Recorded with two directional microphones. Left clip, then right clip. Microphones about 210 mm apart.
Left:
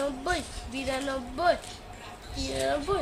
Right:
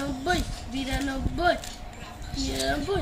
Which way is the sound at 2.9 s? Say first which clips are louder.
Even; 20° left (ahead or behind).